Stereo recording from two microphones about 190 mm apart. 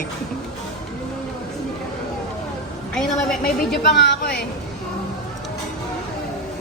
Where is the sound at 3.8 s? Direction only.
60° left (ahead or behind).